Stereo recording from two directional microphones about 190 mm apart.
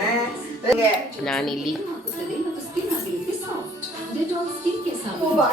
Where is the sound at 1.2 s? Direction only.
5° left (ahead or behind).